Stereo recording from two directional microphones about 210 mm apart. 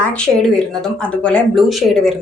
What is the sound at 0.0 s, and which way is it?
A woman's voice, 5° left (ahead or behind).